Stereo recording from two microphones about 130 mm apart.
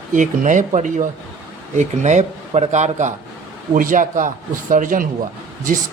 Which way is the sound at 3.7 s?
90° right.